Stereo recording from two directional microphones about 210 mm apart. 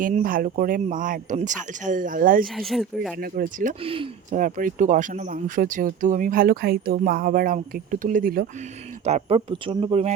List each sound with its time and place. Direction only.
0.0 s speech: 40° right (ahead or behind)
2.6 s speech: centre (ahead or behind)
3.2 s speech: 45° right (ahead or behind)
3.8 s speech: 25° right (ahead or behind)
4.4 s speech: 40° right (ahead or behind)
9.0 s speech: 30° right (ahead or behind)